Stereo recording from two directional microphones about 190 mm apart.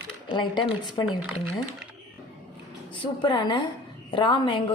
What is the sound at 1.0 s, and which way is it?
Speech, 5° right (ahead or behind).